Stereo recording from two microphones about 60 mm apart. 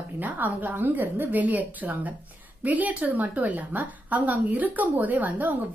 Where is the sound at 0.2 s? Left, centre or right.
Right.